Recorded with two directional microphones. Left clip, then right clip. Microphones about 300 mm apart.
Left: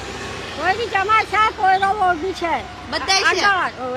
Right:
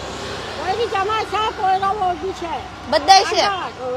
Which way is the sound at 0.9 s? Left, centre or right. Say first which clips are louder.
Left 3 dB; left.